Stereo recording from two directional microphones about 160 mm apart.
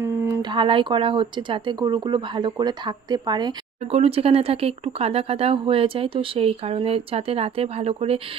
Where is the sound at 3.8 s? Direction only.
40° right (ahead or behind).